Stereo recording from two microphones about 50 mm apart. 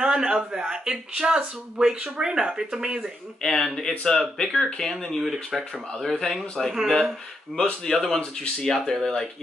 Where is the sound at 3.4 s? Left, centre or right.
Centre.